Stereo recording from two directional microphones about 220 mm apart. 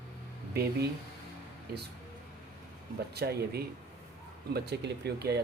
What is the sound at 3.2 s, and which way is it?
Speech, 45° right (ahead or behind).